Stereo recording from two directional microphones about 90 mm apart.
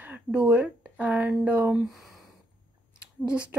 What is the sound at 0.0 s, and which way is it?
A woman's voice, 15° right (ahead or behind).